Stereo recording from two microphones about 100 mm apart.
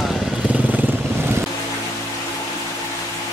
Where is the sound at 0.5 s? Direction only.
15° right (ahead or behind).